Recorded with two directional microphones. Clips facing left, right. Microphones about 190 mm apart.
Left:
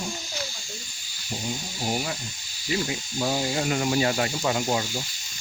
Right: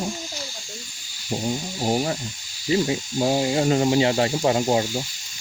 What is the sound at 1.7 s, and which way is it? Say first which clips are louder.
Speech: right 6 dB; 35° right (ahead or behind).